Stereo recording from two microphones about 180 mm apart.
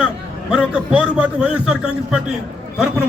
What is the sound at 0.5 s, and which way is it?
A man's voice, 5° right (ahead or behind).